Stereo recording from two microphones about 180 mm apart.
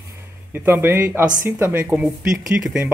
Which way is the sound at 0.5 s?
10° right (ahead or behind).